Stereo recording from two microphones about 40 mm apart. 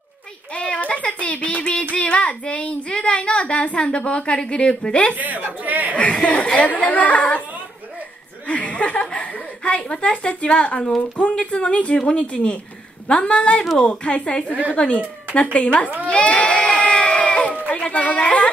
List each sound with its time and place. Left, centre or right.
0.7 s child singing: left
5.1 s a woman's voice: right
5.7 s chuckle: right
5.9 s speech: left
6.7 s speech: left
8.5 s a woman's voice: left
14.5 s a woman's voice: right
14.8 s speech: left
16.5 s sheep: left
17.6 s speech: left